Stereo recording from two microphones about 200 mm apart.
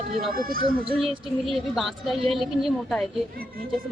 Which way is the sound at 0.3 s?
45° right (ahead or behind).